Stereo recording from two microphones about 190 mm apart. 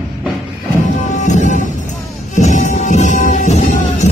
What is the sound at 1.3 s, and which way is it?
Music, 40° left (ahead or behind).